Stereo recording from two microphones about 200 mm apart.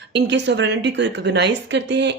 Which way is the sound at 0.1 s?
60° right (ahead or behind).